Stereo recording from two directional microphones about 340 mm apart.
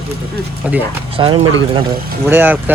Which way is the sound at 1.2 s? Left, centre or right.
Centre.